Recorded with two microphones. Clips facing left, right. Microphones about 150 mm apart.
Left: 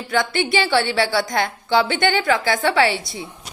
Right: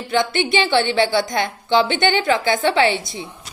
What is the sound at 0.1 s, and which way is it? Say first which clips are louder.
A woman's voice: right 1 dB; 20° right (ahead or behind).